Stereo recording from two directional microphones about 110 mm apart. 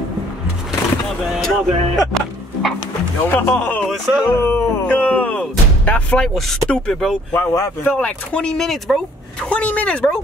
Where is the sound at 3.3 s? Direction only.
15° left (ahead or behind).